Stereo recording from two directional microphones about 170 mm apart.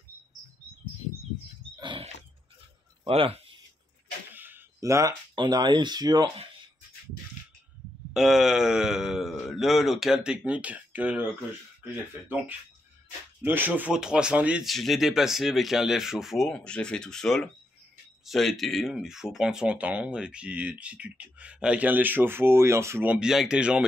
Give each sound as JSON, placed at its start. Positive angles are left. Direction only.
{"t": 1.8, "sound": "wild animals", "side_deg": -30}
{"t": 3.1, "sound": "speech", "side_deg": -35}
{"t": 4.3, "sound": "speech", "side_deg": -10}
{"t": 8.1, "sound": "speech", "side_deg": 0}